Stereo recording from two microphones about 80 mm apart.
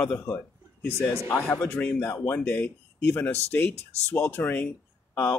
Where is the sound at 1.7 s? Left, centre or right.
Left.